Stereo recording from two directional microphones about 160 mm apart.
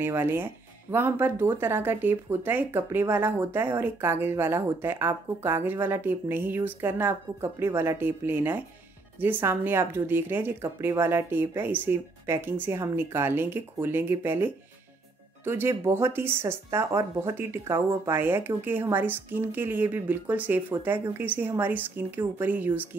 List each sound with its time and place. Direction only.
0.0 s speech: 15° right (ahead or behind)